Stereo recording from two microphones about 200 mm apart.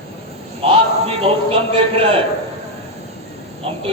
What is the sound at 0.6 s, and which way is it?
A man's voice, 30° right (ahead or behind).